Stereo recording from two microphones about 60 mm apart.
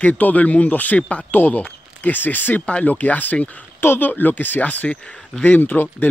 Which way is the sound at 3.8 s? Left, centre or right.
Left.